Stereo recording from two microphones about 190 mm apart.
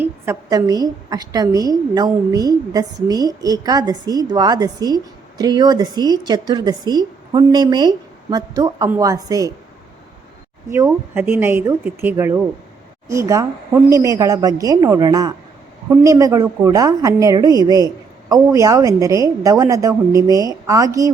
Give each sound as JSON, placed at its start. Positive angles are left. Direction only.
{"t": 0.0, "sound": "a woman's voice", "side_deg": -15}
{"t": 10.7, "sound": "a woman's voice", "side_deg": -10}